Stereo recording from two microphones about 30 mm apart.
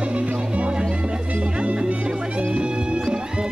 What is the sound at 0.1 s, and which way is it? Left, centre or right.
Music, right.